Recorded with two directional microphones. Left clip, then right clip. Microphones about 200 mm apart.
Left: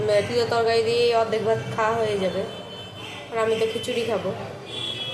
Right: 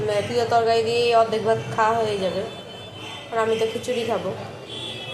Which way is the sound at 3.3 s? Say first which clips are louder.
Right 1 dB; centre (ahead or behind).